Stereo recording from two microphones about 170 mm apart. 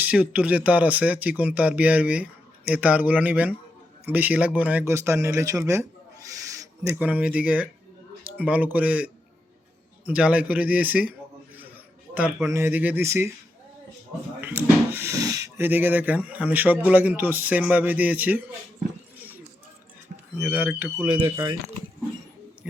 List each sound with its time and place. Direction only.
0.0 s speech: 10° right (ahead or behind)
10.1 s speech: 5° right (ahead or behind)
12.1 s speech: 10° right (ahead or behind)
14.4 s speech: 15° right (ahead or behind)
20.4 s speech: 10° right (ahead or behind)
21.1 s speech: 25° right (ahead or behind)
22.6 s speech: 5° right (ahead or behind)